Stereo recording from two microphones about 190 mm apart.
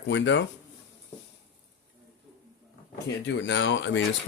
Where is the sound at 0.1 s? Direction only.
70° left (ahead or behind).